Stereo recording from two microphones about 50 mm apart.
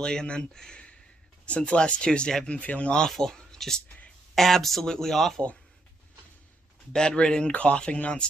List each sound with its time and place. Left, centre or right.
0.0 s speech: centre
3.0 s speech: centre
6.9 s speech: centre